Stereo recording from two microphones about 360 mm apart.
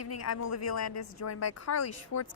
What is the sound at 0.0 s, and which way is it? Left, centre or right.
A woman's voice, left.